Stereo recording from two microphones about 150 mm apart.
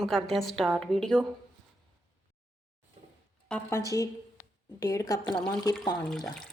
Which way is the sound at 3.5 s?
15° left (ahead or behind).